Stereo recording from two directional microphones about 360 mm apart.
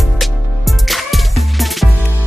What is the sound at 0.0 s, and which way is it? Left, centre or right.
Music, centre.